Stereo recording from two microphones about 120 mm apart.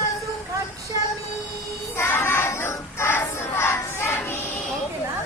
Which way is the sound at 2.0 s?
20° left (ahead or behind).